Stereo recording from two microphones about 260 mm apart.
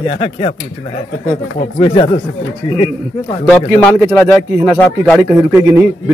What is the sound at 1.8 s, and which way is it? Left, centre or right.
A man's voice, centre.